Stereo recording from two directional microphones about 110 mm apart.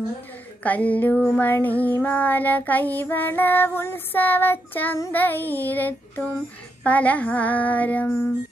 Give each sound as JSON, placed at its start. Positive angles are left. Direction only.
{"t": 0.7, "sound": "child singing", "side_deg": 15}
{"t": 1.1, "sound": "female singing", "side_deg": 0}
{"t": 1.4, "sound": "child singing", "side_deg": 15}